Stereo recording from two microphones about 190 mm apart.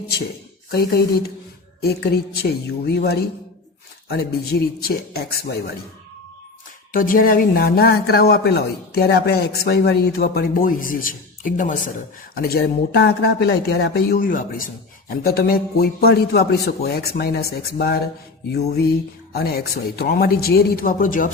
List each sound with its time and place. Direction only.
0.7 s a man's voice: 55° left (ahead or behind)
6.9 s a man's voice: 50° left (ahead or behind)
19.3 s speech: 55° left (ahead or behind)